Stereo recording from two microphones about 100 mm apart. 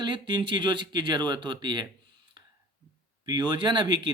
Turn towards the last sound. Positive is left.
turn(degrees=-50)  # may be behind; listen again after turning